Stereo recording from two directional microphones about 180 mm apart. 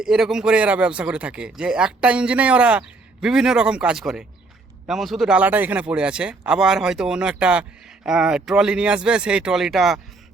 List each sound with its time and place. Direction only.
0.0 s speech: centre (ahead or behind)